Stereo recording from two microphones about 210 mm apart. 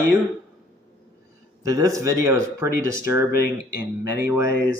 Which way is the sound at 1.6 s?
15° right (ahead or behind).